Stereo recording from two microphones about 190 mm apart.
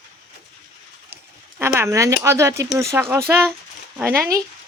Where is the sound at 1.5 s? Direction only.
10° right (ahead or behind).